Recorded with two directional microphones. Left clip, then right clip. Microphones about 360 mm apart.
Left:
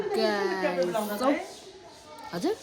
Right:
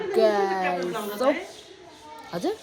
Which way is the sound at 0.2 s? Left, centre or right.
Centre.